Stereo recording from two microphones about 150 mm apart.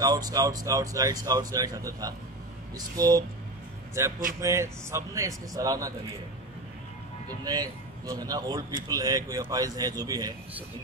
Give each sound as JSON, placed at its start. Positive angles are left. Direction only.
{"t": 0.0, "sound": "a man's voice", "side_deg": -25}
{"t": 4.4, "sound": "a man's voice", "side_deg": -20}
{"t": 7.2, "sound": "a man's voice", "side_deg": -25}